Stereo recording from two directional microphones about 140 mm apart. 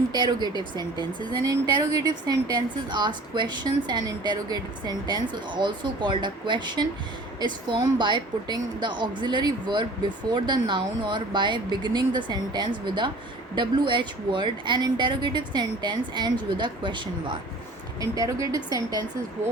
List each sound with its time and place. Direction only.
0.1 s a woman's voice: 30° right (ahead or behind)